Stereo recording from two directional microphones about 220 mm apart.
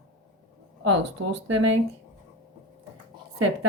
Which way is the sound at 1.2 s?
65° right (ahead or behind).